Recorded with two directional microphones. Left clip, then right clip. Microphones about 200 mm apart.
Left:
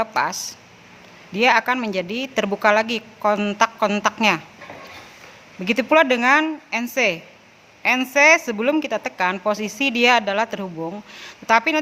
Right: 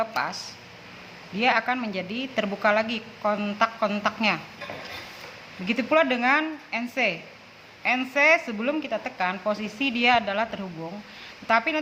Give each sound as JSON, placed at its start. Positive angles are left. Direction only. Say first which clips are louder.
{"t": 0.0, "sound": "speech", "louder": "left 6 dB", "side_deg": 50}
{"t": 5.6, "sound": "speech", "louder": "left 6 dB", "side_deg": 50}